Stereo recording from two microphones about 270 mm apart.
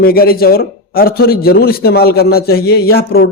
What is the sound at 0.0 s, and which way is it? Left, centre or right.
Speech, left.